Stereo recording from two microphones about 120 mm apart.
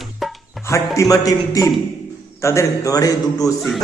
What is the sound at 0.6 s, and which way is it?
Speech, 25° left (ahead or behind).